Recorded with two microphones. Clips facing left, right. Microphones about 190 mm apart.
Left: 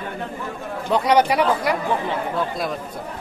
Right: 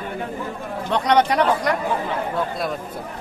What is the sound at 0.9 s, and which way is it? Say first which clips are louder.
Speech: left 1 dB; 5° left (ahead or behind).